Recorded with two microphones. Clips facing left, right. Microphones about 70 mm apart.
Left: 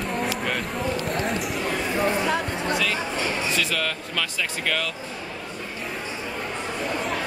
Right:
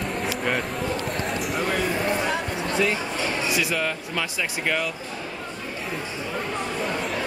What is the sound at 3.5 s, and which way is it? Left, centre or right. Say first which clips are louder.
Speech: right 1 dB; centre.